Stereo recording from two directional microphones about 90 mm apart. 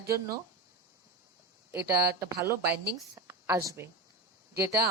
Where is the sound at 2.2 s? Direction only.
30° right (ahead or behind).